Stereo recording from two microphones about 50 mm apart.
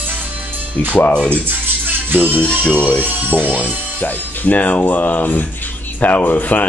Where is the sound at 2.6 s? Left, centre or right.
Left.